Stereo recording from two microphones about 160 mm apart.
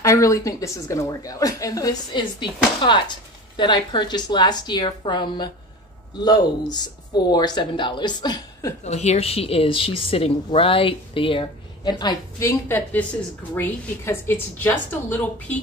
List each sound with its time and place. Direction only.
0.0 s a woman's voice: 20° left (ahead or behind)
8.8 s a woman's voice: 45° left (ahead or behind); by 12.4 s 25° left (ahead or behind)
12.4 s speech: 15° left (ahead or behind)